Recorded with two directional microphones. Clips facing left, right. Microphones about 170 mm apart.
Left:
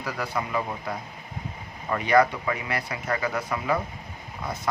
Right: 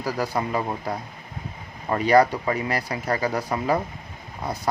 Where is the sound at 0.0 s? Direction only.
35° right (ahead or behind).